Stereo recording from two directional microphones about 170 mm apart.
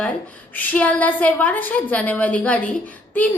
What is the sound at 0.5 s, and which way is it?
A woman's voice, 10° left (ahead or behind).